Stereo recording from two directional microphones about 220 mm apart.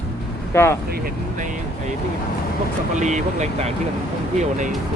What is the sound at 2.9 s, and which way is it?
Speech, 35° right (ahead or behind).